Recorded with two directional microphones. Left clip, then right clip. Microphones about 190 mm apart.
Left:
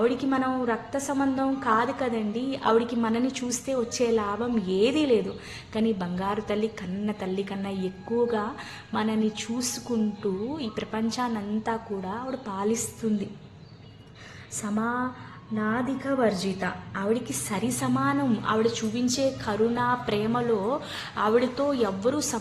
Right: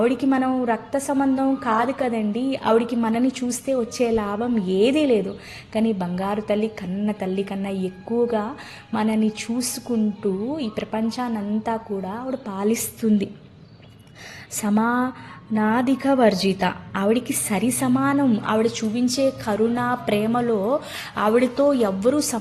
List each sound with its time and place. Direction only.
0.0 s a woman's voice: 30° right (ahead or behind)
8.9 s a woman's voice: 25° right (ahead or behind)
13.0 s speech: 45° right (ahead or behind)
14.6 s a woman's voice: 45° right (ahead or behind)